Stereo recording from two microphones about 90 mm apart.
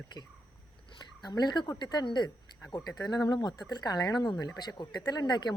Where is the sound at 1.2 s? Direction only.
50° left (ahead or behind).